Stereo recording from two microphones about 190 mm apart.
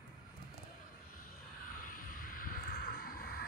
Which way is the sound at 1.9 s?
45° left (ahead or behind).